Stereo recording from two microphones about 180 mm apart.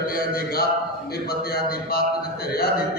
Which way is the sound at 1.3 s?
60° left (ahead or behind).